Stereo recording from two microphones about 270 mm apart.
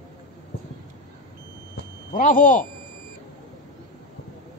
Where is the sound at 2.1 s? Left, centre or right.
Left.